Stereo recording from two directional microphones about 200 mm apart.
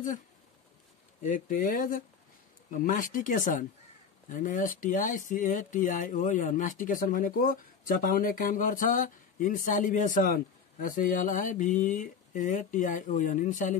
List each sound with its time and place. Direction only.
1.2 s speech: 40° left (ahead or behind)